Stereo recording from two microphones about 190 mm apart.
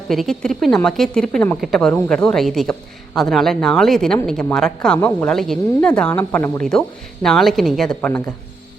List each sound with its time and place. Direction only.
0.1 s speech: centre (ahead or behind)